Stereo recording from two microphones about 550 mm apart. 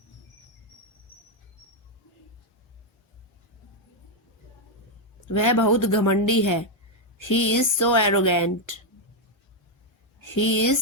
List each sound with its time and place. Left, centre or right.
5.3 s speech: left
10.2 s speech: left